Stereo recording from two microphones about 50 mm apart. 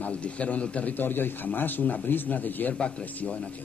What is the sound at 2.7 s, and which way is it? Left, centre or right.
Speech, left.